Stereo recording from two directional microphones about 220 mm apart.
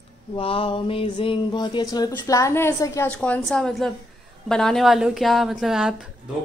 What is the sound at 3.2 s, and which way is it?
A woman's voice, 5° left (ahead or behind).